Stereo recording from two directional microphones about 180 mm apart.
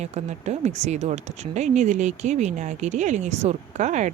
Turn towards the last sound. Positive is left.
turn(degrees=-40)  # may be behind; listen again after turning